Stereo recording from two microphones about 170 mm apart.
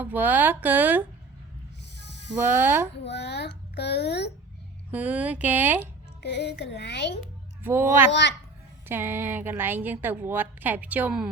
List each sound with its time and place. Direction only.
0.0 s a woman's voice: 10° right (ahead or behind)
2.0 s a sound: 90° left
2.4 s a woman's voice: 15° right (ahead or behind)
3.0 s a child's voice: 80° left
4.9 s a woman's voice: 10° right (ahead or behind)
6.2 s a child's voice: 80° left
7.6 s a woman's voice: 15° right (ahead or behind)